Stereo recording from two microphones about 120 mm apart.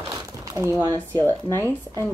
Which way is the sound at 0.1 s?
25° right (ahead or behind).